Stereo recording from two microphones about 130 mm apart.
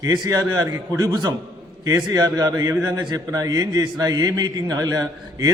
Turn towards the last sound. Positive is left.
turn(degrees=-25)  # may be behind; listen again after turning